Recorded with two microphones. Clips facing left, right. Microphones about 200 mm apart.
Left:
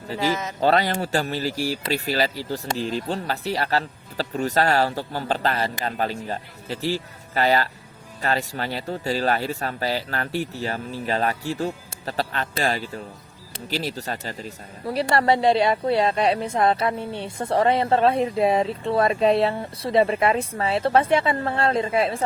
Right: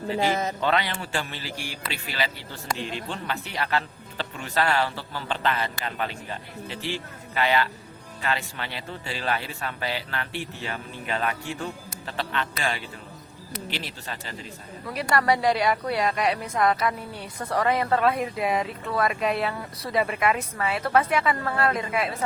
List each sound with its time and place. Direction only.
0.6 s speech: 40° left (ahead or behind)